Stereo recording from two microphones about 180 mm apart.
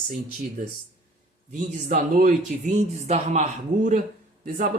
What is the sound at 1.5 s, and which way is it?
A man's voice, 45° right (ahead or behind).